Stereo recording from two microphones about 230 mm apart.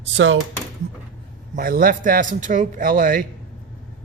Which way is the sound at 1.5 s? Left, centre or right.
Right.